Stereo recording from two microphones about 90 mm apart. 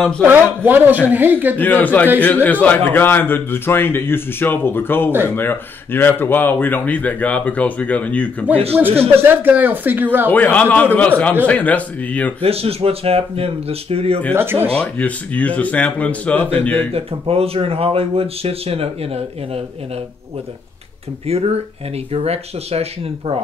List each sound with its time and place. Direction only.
0.0 s speech: 10° left (ahead or behind)
0.7 s speech: 20° right (ahead or behind)
1.6 s a man's voice: 20° left (ahead or behind)
8.7 s speech: 20° right (ahead or behind)
10.3 s speech: 15° left (ahead or behind)
12.4 s speech: 90° right
14.3 s speech: 25° right (ahead or behind)
14.7 s speech: 10° left (ahead or behind)
16.7 s speech: 90° right